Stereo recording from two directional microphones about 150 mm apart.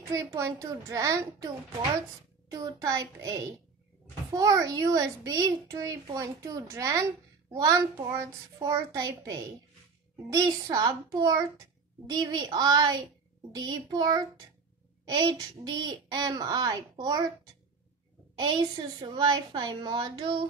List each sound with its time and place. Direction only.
0.4 s a child's voice: 20° right (ahead or behind)
18.4 s a child's voice: 25° right (ahead or behind)